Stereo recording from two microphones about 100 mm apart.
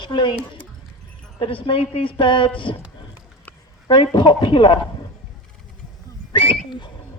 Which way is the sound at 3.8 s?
60° left (ahead or behind).